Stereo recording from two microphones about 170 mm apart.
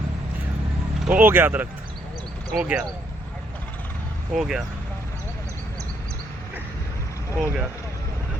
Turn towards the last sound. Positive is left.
turn(degrees=-5)  # may be behind; listen again after turning